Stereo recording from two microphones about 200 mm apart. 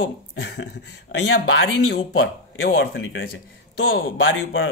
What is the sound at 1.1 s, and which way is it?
A man's voice, 65° left (ahead or behind).